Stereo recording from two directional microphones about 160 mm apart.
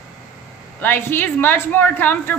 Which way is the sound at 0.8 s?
15° left (ahead or behind).